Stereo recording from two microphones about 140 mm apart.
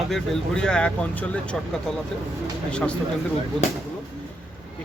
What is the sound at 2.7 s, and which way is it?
Speech, 10° left (ahead or behind).